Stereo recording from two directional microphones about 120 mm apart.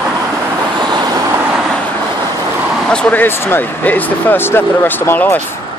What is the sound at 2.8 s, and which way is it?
Speech, 10° left (ahead or behind).